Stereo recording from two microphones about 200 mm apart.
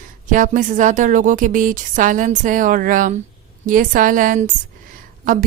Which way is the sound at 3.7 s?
45° right (ahead or behind).